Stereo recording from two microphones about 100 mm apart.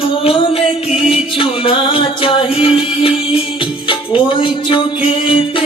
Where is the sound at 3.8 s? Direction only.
55° left (ahead or behind).